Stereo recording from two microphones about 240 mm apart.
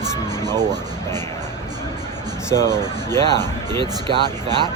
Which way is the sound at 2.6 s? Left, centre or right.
Centre.